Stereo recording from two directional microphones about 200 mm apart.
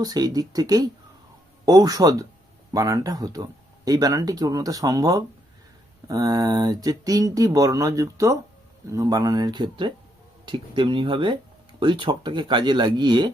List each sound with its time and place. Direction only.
0.0 s speech: 20° right (ahead or behind)